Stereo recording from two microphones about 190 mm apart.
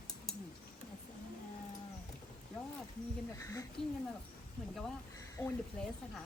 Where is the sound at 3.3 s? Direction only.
15° left (ahead or behind).